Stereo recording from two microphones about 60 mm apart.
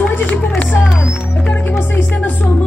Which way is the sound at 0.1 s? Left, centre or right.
Left.